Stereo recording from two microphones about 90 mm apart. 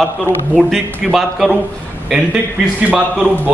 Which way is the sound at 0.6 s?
Centre (ahead or behind).